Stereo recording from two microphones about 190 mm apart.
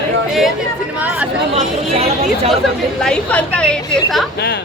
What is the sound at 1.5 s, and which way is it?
Speech, 30° right (ahead or behind).